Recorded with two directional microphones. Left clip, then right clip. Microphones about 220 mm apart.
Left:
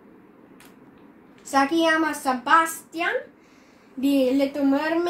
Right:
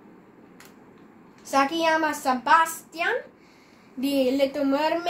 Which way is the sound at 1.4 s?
20° right (ahead or behind).